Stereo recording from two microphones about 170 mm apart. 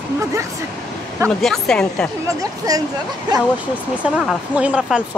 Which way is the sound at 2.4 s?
20° right (ahead or behind).